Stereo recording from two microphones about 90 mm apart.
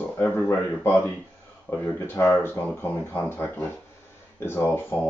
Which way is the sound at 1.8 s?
25° left (ahead or behind).